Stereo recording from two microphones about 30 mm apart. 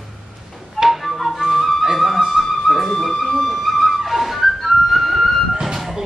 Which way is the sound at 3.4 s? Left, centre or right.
Centre.